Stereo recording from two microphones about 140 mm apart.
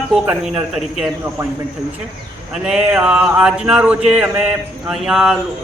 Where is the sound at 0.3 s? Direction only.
5° right (ahead or behind).